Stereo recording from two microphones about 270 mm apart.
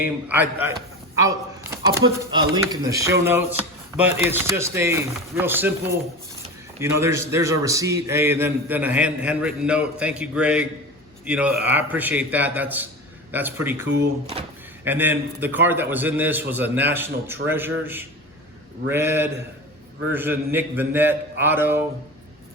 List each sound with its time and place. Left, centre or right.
0.0 s a man's voice: centre
1.2 s a sound: centre
2.3 s a man's voice: centre
13.8 s speech: right
14.8 s a man's voice: centre
18.9 s a man's voice: centre